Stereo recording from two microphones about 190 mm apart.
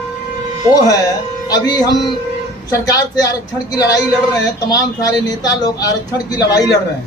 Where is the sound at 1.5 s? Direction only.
20° left (ahead or behind).